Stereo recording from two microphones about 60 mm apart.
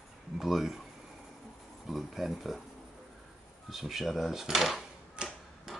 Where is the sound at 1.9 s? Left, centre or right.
Centre.